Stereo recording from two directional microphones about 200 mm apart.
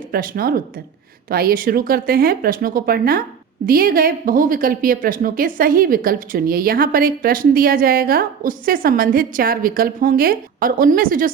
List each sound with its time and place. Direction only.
0.1 s a woman's voice: 45° right (ahead or behind)